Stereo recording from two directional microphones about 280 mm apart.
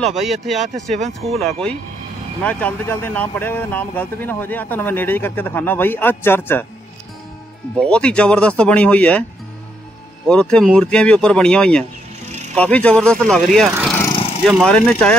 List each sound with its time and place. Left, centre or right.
0.0 s speech: centre
7.8 s speech: centre
10.2 s speech: centre
14.0 s vehicle: centre
14.4 s speech: centre